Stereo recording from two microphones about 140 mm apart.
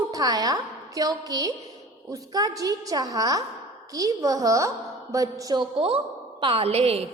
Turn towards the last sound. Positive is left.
turn(degrees=-45)  # may be behind; listen again after turning